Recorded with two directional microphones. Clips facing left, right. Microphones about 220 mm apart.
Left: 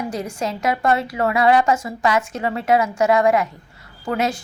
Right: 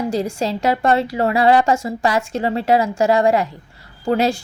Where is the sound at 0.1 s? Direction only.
30° right (ahead or behind).